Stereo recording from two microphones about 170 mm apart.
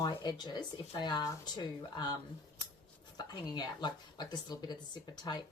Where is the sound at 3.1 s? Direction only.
25° left (ahead or behind).